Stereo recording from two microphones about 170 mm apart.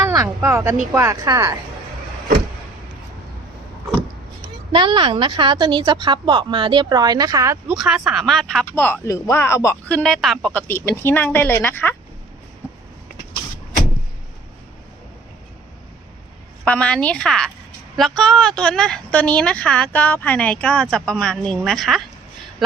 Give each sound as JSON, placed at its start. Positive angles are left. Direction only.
{"t": 0.0, "sound": "a woman's voice", "side_deg": -20}
{"t": 4.7, "sound": "a woman's voice", "side_deg": -30}
{"t": 7.7, "sound": "speech", "side_deg": -5}
{"t": 8.6, "sound": "speech", "side_deg": 15}
{"t": 10.0, "sound": "speech", "side_deg": 0}
{"t": 16.6, "sound": "speech", "side_deg": 5}